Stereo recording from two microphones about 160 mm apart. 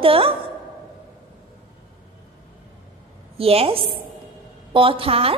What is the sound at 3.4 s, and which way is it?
A woman's voice, 35° right (ahead or behind).